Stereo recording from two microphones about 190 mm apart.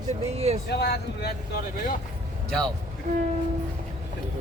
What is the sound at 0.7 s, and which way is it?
Speech, 60° left (ahead or behind).